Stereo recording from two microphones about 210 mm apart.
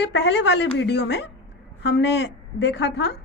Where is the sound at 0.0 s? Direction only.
55° left (ahead or behind).